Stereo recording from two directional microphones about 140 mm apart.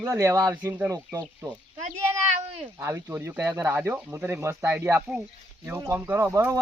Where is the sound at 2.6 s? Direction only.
20° right (ahead or behind).